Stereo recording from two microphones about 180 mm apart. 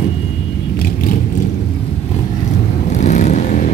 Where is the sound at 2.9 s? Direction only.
40° left (ahead or behind).